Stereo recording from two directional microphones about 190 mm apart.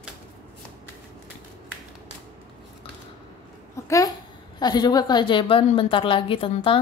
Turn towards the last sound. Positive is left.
turn(degrees=25)  # may be behind; listen again after turning